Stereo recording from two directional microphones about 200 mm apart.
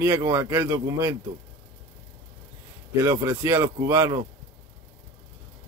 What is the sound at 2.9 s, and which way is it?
Speech, 15° right (ahead or behind).